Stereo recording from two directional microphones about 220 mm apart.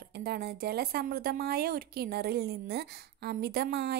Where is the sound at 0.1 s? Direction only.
45° right (ahead or behind).